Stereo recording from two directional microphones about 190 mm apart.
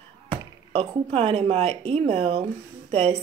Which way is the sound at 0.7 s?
30° right (ahead or behind).